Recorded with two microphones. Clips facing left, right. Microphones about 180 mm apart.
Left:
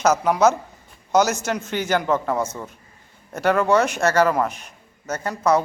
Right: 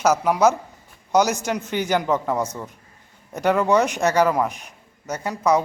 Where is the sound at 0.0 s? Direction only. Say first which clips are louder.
Even; 10° right (ahead or behind).